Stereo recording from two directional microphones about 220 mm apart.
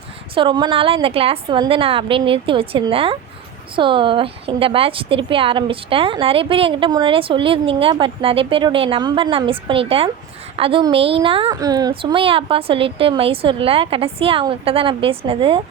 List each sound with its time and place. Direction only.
0.3 s a woman's voice: 20° right (ahead or behind)